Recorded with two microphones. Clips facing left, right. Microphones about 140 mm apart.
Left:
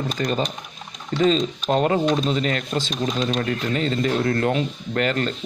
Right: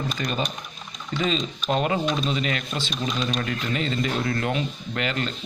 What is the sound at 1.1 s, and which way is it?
Speech, 35° left (ahead or behind).